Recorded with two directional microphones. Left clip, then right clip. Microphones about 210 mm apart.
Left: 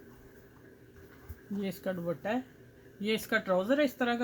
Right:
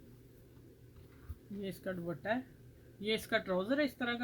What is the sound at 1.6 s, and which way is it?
Speech, 35° left (ahead or behind).